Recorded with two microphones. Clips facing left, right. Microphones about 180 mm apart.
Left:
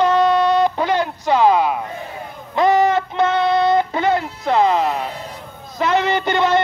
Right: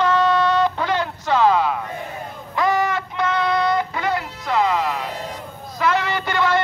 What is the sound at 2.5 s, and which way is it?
Child singing, 25° left (ahead or behind).